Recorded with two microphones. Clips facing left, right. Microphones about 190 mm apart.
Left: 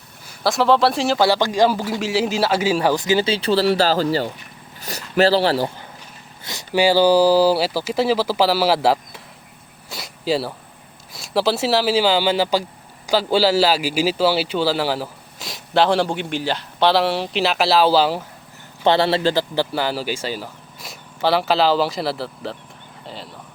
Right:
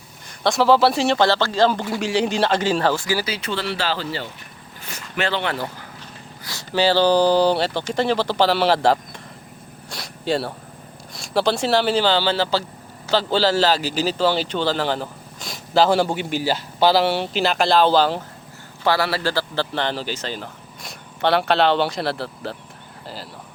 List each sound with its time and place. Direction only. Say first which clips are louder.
0.3 s a man's voice: even; centre (ahead or behind); by 4.3 s 40° left (ahead or behind)
4.8 s a sound: left 9 dB; 35° left (ahead or behind)
6.4 s a man's voice: left 2 dB; 20° left (ahead or behind)
9.9 s a sound: left 1 dB; centre (ahead or behind)
11.1 s a man's voice: left 1 dB; centre (ahead or behind)
18.9 s a man's voice: left 4 dB; 25° left (ahead or behind)
19.7 s a man's voice: left 2 dB; 5° left (ahead or behind)